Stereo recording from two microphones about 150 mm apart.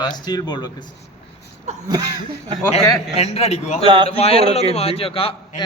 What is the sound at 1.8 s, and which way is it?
Speech, 25° right (ahead or behind).